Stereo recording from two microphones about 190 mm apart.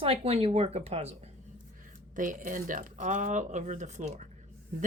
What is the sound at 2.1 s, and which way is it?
A woman's voice, 45° right (ahead or behind).